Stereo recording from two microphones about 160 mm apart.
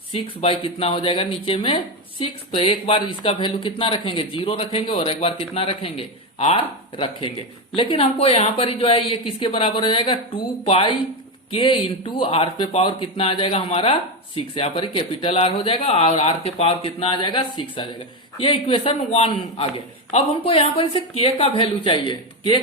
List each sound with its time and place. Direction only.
0.1 s speech: 40° left (ahead or behind)